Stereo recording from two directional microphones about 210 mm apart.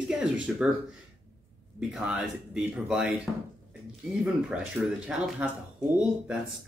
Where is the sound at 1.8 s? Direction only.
5° right (ahead or behind).